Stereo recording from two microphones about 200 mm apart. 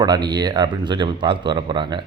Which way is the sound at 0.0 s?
20° right (ahead or behind).